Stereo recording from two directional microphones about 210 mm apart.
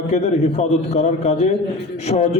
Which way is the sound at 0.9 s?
30° left (ahead or behind).